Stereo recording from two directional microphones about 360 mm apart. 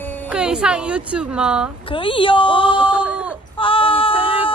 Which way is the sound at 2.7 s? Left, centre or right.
Centre.